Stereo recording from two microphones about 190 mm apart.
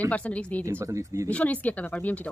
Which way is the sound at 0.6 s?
15° right (ahead or behind).